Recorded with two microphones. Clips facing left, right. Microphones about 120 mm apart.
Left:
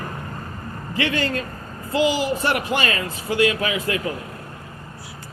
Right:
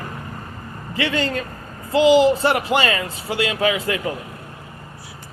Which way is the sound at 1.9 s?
25° right (ahead or behind).